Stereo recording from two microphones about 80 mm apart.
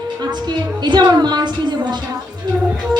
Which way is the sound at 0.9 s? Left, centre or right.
Right.